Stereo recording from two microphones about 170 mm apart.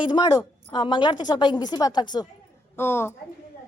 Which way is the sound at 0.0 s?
25° left (ahead or behind).